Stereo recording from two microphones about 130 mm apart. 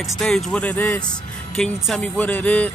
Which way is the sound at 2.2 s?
10° left (ahead or behind).